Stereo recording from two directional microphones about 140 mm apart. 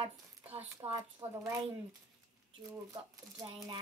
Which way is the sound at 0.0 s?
45° right (ahead or behind).